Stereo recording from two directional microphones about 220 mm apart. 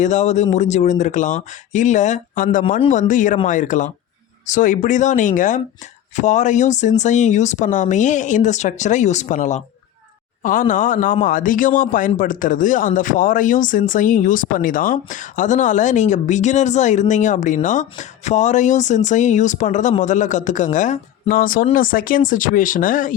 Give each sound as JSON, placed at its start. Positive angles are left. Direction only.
{"t": 0.0, "sound": "a man's voice", "side_deg": 35}